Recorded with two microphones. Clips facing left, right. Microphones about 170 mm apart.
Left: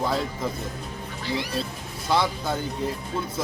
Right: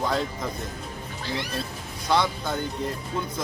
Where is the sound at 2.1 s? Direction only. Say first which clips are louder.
Even; 5° left (ahead or behind).